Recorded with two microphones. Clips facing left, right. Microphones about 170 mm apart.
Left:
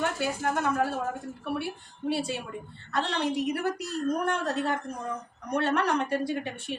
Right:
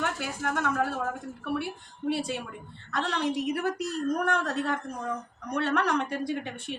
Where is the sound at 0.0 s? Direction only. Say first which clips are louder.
Left 3 dB; 30° left (ahead or behind).